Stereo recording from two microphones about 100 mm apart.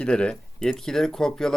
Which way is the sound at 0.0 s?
10° left (ahead or behind).